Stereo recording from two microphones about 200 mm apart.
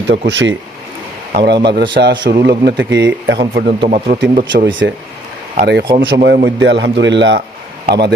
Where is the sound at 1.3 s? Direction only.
55° right (ahead or behind).